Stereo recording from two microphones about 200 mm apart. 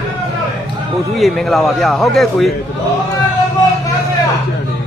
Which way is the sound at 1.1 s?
Centre (ahead or behind).